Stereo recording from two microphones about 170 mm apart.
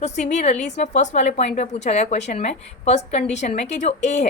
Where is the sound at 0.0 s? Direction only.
45° left (ahead or behind).